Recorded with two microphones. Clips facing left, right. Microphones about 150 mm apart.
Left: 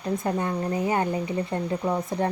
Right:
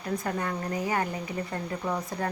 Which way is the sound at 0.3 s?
25° left (ahead or behind).